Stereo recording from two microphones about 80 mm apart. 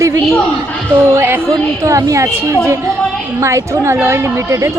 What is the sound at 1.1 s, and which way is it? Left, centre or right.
Speech, right.